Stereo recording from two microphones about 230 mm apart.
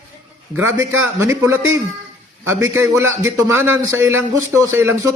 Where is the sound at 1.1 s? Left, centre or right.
Centre.